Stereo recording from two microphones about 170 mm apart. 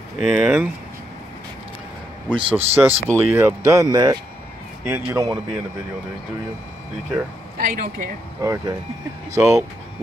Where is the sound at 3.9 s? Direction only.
25° right (ahead or behind).